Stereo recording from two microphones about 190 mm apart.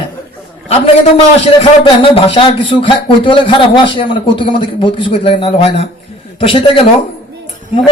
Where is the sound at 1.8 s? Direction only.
30° left (ahead or behind).